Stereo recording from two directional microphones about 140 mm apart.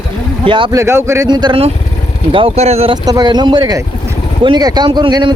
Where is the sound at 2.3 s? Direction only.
45° right (ahead or behind).